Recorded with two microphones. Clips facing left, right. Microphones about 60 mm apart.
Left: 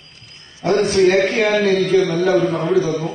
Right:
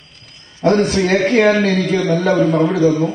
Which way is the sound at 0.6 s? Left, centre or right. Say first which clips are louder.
Right 1 dB; right.